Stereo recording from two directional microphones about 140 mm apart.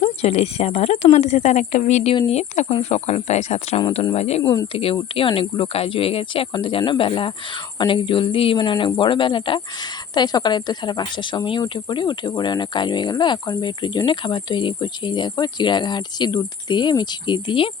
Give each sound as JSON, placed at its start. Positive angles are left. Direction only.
{"t": 0.0, "sound": "speech", "side_deg": 50}